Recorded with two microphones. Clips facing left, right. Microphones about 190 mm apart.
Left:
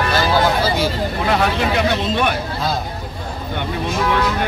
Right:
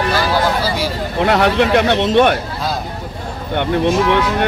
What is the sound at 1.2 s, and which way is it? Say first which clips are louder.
Speech: right 5 dB; 70° right (ahead or behind).